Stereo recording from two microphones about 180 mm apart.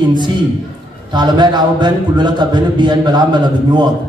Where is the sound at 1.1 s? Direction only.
25° right (ahead or behind).